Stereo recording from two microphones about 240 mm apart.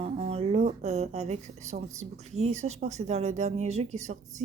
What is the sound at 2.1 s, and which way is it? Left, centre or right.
Speech, right.